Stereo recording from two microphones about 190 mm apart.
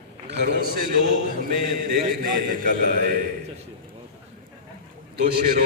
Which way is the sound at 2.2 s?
45° right (ahead or behind).